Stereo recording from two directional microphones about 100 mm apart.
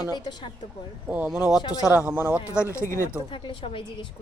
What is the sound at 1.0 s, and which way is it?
Speech, 15° right (ahead or behind).